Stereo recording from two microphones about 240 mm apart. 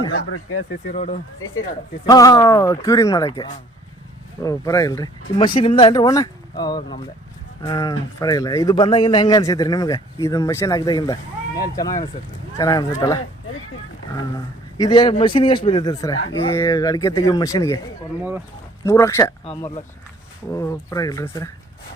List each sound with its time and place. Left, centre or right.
0.1 s speech: left
0.9 s speech: left
2.0 s speech: centre
14.3 s speech: centre
18.9 s speech: centre
19.5 s speech: left
20.5 s speech: centre